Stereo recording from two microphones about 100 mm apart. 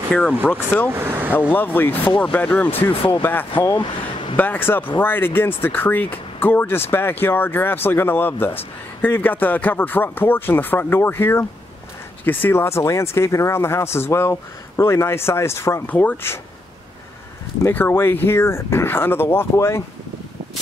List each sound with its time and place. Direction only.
0.1 s speech: 10° left (ahead or behind)
0.8 s speech: 20° right (ahead or behind)
1.5 s speech: 20° left (ahead or behind)
17.6 s speech: 20° left (ahead or behind)